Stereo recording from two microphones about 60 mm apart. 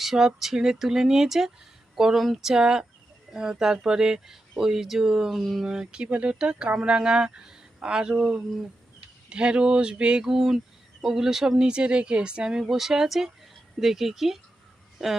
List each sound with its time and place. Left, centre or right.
0.0 s speech: centre
5.6 s speech: centre